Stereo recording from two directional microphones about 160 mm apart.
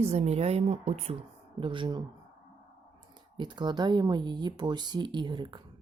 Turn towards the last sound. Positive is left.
turn(degrees=-30)  # may be behind; listen again after turning